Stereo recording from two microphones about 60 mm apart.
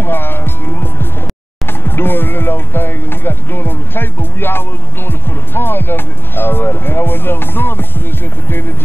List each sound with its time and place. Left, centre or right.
0.0 s music: left
1.7 s speech: left